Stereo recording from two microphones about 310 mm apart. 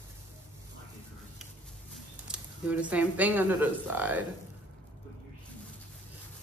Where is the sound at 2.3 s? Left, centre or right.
Centre.